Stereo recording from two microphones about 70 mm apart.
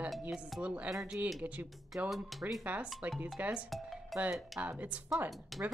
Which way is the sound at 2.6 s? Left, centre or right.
Right.